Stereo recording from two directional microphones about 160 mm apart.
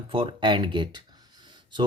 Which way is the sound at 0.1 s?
35° right (ahead or behind).